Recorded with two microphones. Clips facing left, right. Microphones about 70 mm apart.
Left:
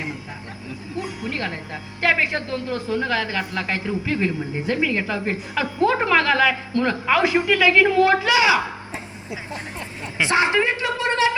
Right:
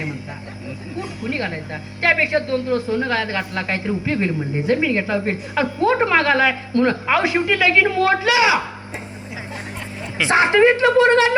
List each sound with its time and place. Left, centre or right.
1.3 s a woman's voice: centre
10.2 s speech: right
10.7 s speech: right